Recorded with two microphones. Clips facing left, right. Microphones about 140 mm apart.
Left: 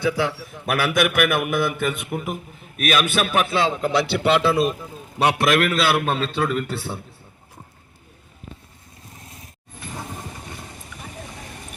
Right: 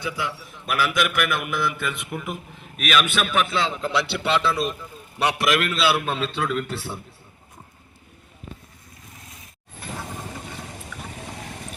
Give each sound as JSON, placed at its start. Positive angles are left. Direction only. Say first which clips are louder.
{"t": 0.0, "sound": "a man's voice", "louder": "left 7 dB", "side_deg": 75}
{"t": 0.6, "sound": "a man's voice", "louder": "left 3 dB", "side_deg": 60}
{"t": 3.8, "sound": "a man's voice", "louder": "left 4 dB", "side_deg": 45}